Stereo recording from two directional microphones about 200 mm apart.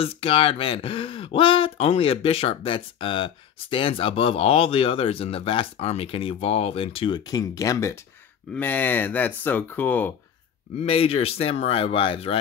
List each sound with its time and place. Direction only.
0.0 s speech: 30° left (ahead or behind); by 10.1 s 10° left (ahead or behind)
10.8 s speech: 30° left (ahead or behind)